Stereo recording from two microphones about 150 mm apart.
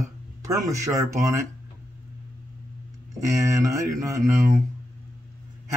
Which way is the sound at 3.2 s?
20° right (ahead or behind).